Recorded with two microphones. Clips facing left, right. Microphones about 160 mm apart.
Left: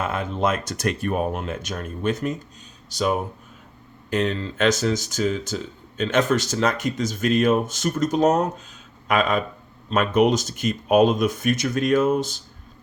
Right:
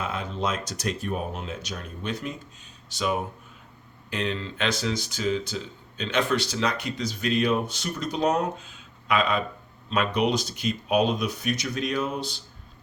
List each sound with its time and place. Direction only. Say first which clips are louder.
0.0 s speech: left 6 dB; 50° left (ahead or behind)